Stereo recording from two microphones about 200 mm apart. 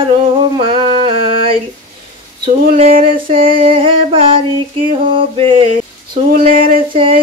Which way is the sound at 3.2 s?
45° right (ahead or behind).